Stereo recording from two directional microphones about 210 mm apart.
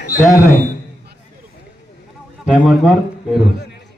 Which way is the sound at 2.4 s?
5° right (ahead or behind).